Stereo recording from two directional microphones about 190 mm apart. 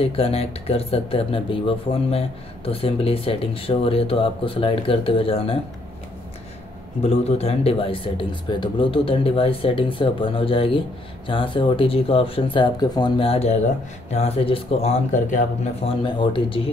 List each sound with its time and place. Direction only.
0.0 s speech: 30° left (ahead or behind)
7.0 s speech: 35° left (ahead or behind)